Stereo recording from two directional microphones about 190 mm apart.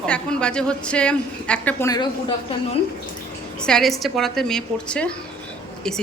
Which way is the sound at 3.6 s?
Centre (ahead or behind).